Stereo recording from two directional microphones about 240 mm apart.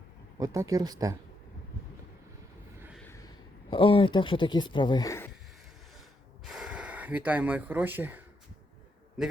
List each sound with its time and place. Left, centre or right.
0.3 s speech: centre
3.0 s a sound: centre
3.7 s speech: left
6.5 s speech: centre